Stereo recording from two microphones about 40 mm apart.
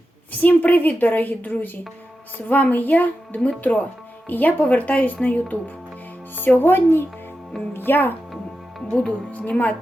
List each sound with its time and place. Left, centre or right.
0.3 s a woman's voice: left
4.3 s a woman's voice: left
6.3 s speech: left
8.9 s speech: left